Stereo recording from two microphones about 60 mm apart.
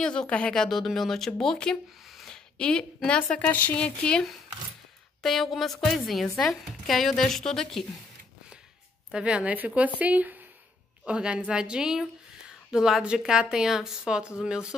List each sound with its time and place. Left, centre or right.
0.0 s speech: centre
0.6 s speech: centre
2.0 s a sound: centre
3.3 s a woman's voice: left
3.7 s speech: centre
5.2 s a woman's voice: centre
9.1 s speech: centre
11.1 s a woman's voice: centre